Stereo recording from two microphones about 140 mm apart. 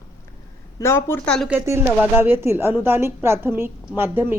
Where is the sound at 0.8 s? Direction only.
20° left (ahead or behind).